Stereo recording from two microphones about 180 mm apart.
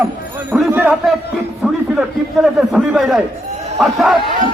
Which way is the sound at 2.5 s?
Centre (ahead or behind).